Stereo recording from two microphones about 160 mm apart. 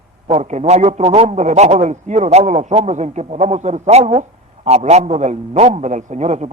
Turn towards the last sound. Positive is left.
turn(degrees=-45)  # may be behind; listen again after turning